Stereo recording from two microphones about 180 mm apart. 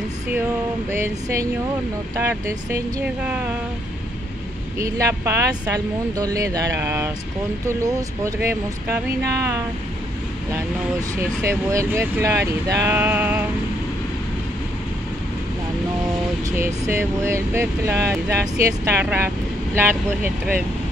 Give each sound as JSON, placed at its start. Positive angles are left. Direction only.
{"t": 0.9, "sound": "speech", "side_deg": -15}
{"t": 4.7, "sound": "speech", "side_deg": -15}
{"t": 16.4, "sound": "speech", "side_deg": -15}